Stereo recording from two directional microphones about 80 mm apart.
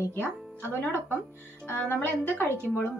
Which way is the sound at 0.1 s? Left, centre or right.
Left.